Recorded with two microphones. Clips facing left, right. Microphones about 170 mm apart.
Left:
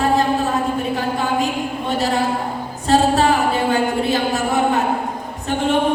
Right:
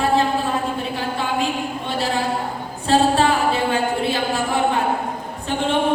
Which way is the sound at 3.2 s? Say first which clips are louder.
Left 2 dB; 40° left (ahead or behind).